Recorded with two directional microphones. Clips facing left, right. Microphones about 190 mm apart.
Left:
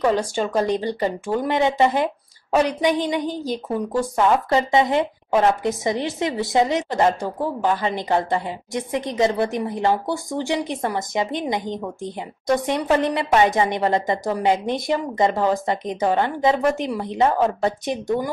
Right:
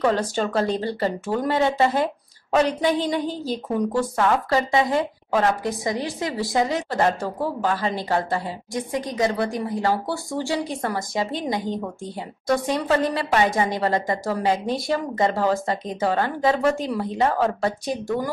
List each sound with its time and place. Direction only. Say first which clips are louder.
0.0 s speech: left 1 dB; 10° left (ahead or behind)